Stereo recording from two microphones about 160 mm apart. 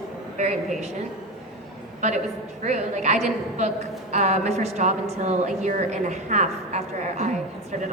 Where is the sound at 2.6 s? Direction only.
45° right (ahead or behind).